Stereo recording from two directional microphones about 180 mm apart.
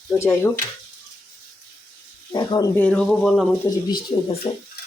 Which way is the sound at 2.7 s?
5° left (ahead or behind).